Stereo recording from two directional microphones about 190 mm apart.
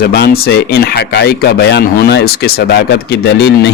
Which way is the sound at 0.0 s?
55° left (ahead or behind).